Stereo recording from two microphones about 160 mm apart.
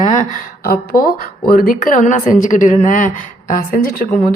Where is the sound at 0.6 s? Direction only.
70° left (ahead or behind).